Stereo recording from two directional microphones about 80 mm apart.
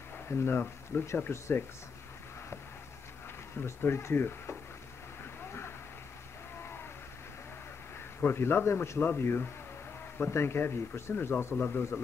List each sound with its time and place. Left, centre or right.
0.3 s speech: left
3.6 s speech: left
8.2 s speech: left